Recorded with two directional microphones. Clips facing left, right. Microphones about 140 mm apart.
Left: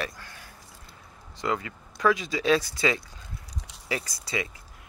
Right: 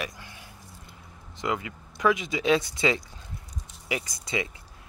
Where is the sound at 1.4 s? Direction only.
20° right (ahead or behind).